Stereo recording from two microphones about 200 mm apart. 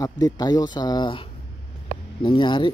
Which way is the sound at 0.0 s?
20° left (ahead or behind).